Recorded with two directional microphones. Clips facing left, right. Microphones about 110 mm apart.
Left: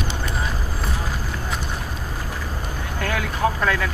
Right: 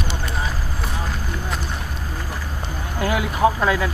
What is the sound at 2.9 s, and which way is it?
Speech, 15° right (ahead or behind).